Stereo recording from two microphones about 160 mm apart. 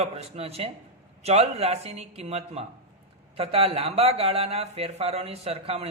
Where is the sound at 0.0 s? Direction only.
40° right (ahead or behind).